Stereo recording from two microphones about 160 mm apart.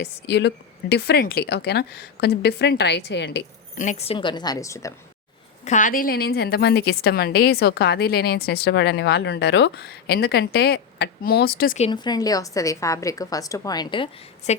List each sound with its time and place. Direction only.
0.0 s a woman's voice: 90° left
3.8 s a woman's voice: 45° left (ahead or behind); by 4.9 s 20° left (ahead or behind)
5.6 s a woman's voice: 55° left (ahead or behind); by 11.8 s 70° left (ahead or behind)
11.9 s a woman's voice: 25° left (ahead or behind)